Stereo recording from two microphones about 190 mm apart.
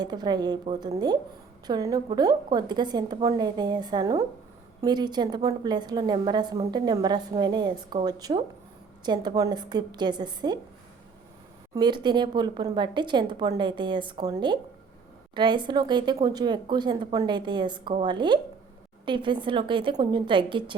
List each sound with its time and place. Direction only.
0.0 s speech: 20° right (ahead or behind)
11.7 s speech: 25° right (ahead or behind)